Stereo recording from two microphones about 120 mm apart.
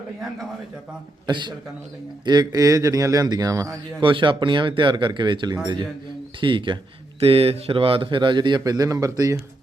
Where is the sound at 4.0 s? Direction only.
45° right (ahead or behind).